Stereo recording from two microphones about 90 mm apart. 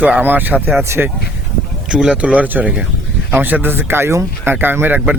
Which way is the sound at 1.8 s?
10° right (ahead or behind).